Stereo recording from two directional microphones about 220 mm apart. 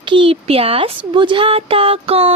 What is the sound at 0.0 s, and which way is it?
A woman's voice, 20° right (ahead or behind).